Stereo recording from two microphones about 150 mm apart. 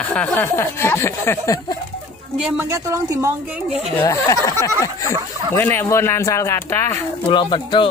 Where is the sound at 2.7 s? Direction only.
20° right (ahead or behind).